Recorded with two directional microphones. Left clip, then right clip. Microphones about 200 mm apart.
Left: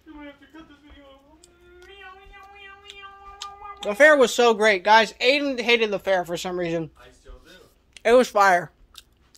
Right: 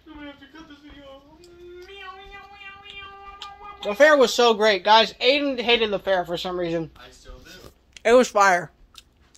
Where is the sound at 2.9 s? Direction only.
20° left (ahead or behind).